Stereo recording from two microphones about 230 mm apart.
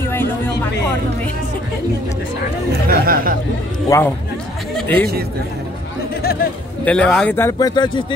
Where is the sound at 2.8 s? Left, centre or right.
Right.